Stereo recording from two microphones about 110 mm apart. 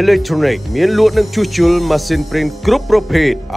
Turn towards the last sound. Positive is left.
turn(degrees=0)  # may be behind; listen again after turning